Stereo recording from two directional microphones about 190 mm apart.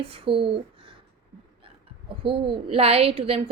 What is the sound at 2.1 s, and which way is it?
Speech, 25° right (ahead or behind).